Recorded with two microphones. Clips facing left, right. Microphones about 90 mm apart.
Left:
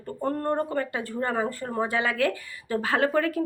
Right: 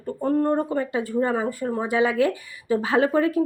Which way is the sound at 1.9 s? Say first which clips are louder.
Right 7 dB; 20° right (ahead or behind).